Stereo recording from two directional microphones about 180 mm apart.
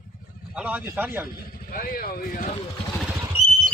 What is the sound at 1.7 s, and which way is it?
Speech, 50° left (ahead or behind).